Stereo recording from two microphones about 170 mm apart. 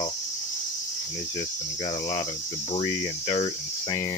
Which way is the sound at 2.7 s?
40° left (ahead or behind).